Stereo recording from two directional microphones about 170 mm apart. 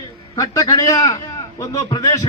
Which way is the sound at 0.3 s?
20° left (ahead or behind).